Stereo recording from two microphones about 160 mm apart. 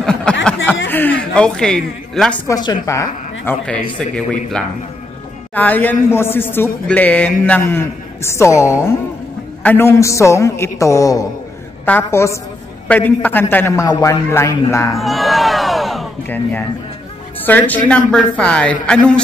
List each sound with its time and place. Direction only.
0.0 s a sound: 5° left (ahead or behind)
2.4 s a woman's voice: 25° left (ahead or behind)
3.6 s a man's voice: 5° left (ahead or behind)
15.0 s crowd: centre (ahead or behind)
17.5 s a man's voice: 10° left (ahead or behind)